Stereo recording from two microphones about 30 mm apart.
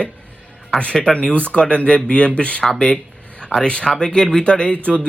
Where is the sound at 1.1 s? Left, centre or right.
Left.